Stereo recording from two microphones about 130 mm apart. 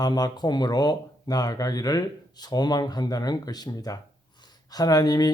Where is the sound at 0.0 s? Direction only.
30° left (ahead or behind).